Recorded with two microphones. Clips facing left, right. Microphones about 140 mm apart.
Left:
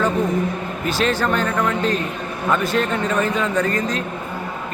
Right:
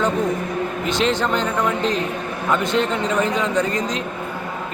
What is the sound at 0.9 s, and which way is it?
A man's voice, 20° right (ahead or behind).